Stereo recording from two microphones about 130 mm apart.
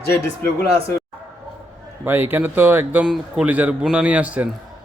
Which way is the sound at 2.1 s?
15° right (ahead or behind).